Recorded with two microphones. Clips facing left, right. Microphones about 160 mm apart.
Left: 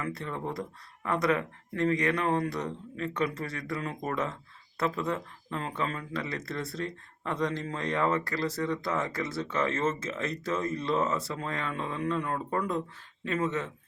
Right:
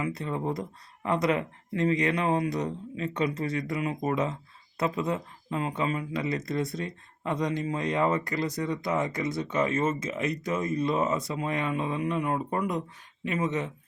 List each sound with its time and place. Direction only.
0.0 s speech: 20° right (ahead or behind)